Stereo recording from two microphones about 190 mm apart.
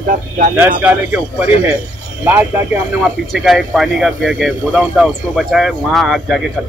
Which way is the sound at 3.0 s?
Centre (ahead or behind).